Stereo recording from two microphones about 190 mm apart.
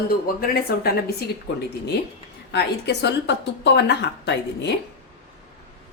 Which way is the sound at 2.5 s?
60° left (ahead or behind).